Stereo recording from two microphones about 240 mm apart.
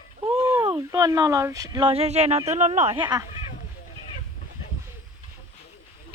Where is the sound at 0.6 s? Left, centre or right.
Centre.